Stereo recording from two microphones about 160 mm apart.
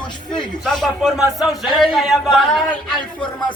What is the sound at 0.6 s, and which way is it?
A man's voice, centre (ahead or behind).